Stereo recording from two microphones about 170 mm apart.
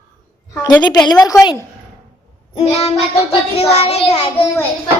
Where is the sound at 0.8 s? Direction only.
25° left (ahead or behind).